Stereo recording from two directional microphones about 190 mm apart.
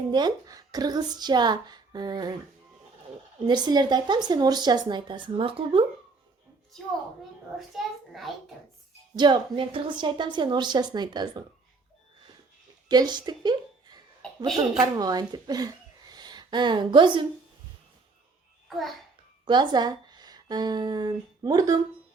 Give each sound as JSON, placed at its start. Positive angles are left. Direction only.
{"t": 0.1, "sound": "speech", "side_deg": -20}
{"t": 3.4, "sound": "speech", "side_deg": -20}
{"t": 7.8, "sound": "a child's voice", "side_deg": 0}
{"t": 9.1, "sound": "speech", "side_deg": -25}
{"t": 12.9, "sound": "a woman's voice", "side_deg": -20}
{"t": 14.2, "sound": "a sound", "side_deg": 5}
{"t": 14.8, "sound": "speech", "side_deg": -20}
{"t": 19.5, "sound": "speech", "side_deg": -25}